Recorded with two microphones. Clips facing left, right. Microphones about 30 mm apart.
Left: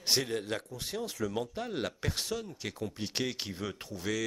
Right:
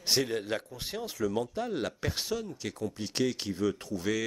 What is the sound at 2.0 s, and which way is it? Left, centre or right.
Speech, centre.